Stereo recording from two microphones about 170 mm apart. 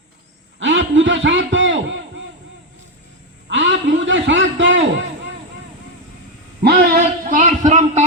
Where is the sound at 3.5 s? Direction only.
90° right.